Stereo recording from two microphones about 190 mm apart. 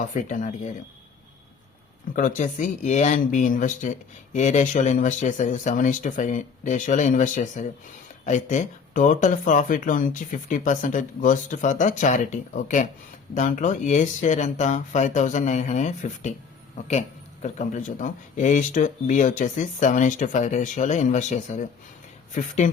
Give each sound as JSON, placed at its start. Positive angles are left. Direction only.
{"t": 0.0, "sound": "speech", "side_deg": 40}
{"t": 2.1, "sound": "speech", "side_deg": 40}
{"t": 17.4, "sound": "speech", "side_deg": 40}